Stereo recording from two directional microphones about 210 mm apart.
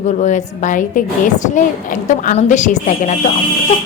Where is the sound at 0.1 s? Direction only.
35° left (ahead or behind).